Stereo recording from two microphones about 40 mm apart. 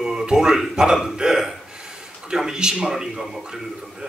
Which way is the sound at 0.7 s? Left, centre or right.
Centre.